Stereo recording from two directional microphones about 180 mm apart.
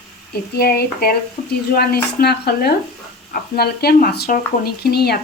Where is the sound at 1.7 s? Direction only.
60° left (ahead or behind).